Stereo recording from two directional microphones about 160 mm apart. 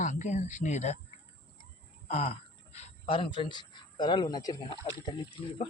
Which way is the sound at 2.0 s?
40° left (ahead or behind).